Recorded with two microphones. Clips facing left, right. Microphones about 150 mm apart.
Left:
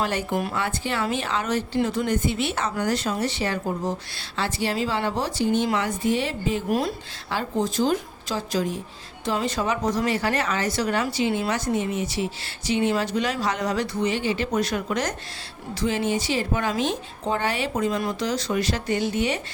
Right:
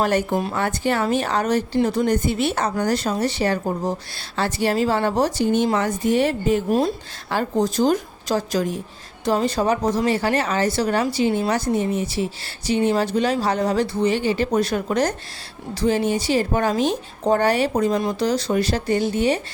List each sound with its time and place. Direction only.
0.0 s a woman's voice: 45° right (ahead or behind)
6.7 s speech: 25° right (ahead or behind)
7.3 s a woman's voice: 45° right (ahead or behind)